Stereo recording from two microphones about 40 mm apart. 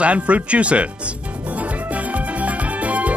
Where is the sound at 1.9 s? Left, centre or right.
Right.